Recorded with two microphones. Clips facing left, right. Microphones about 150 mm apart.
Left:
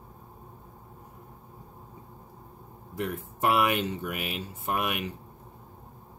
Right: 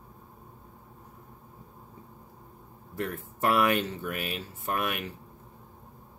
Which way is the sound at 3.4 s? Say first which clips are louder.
Even; 15° left (ahead or behind).